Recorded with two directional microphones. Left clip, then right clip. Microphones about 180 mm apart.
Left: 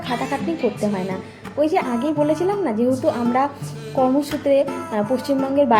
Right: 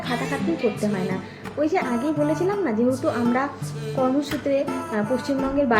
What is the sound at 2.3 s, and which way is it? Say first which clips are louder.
Speech: left 3 dB; 30° left (ahead or behind).